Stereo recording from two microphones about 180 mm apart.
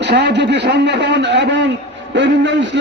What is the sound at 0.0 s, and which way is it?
A man's voice, 70° right (ahead or behind).